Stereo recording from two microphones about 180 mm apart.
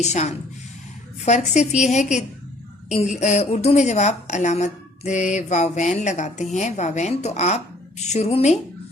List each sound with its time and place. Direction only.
0.0 s a woman's voice: 40° left (ahead or behind)